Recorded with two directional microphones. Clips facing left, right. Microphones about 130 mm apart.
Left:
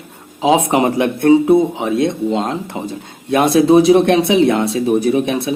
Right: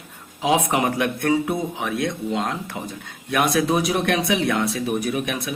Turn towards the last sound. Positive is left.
turn(degrees=30)  # may be behind; listen again after turning